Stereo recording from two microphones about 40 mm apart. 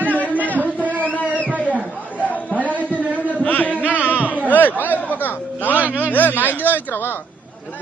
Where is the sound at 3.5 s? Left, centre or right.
Left.